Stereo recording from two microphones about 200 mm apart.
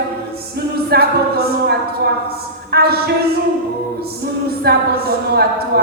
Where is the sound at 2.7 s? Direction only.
50° right (ahead or behind).